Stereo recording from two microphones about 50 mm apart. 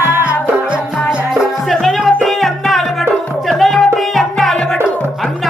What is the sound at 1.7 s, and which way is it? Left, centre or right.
Music, centre.